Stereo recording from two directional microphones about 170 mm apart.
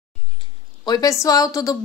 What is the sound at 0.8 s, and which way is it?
Speech, 20° left (ahead or behind).